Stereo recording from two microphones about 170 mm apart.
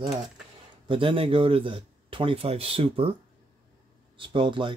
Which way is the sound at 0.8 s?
30° right (ahead or behind).